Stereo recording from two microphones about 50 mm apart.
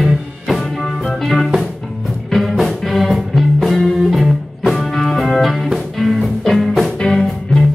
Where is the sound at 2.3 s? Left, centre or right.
Centre.